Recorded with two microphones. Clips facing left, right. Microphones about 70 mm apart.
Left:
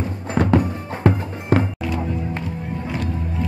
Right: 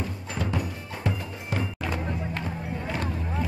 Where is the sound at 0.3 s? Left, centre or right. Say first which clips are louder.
Left 14 dB; left.